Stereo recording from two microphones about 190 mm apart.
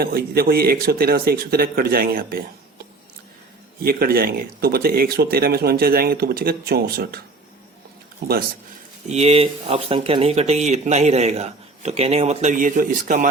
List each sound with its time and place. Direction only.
0.0 s speech: 50° right (ahead or behind)
9.0 s speech: 35° right (ahead or behind)